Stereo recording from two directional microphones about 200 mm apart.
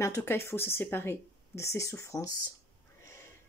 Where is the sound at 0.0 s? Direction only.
10° left (ahead or behind).